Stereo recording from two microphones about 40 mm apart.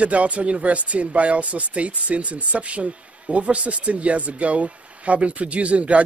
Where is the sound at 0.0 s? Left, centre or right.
Right.